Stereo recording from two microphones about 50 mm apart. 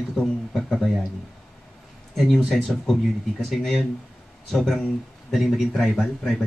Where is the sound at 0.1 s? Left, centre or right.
Centre.